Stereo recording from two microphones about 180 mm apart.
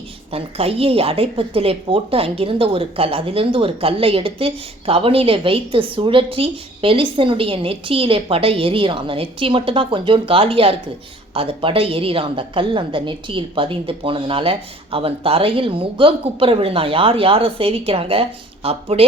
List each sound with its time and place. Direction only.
0.3 s a woman's voice: 35° right (ahead or behind)